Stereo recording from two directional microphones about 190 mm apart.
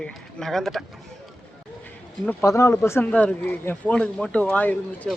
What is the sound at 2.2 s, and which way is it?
Speech, 15° left (ahead or behind).